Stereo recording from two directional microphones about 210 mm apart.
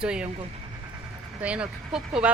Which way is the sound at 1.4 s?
5° right (ahead or behind).